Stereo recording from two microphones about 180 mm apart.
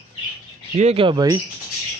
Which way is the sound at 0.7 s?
35° right (ahead or behind).